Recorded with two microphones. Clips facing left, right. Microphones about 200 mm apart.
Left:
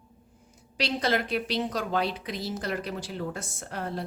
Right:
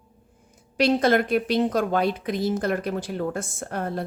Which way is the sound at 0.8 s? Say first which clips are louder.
Right 8 dB; 50° right (ahead or behind).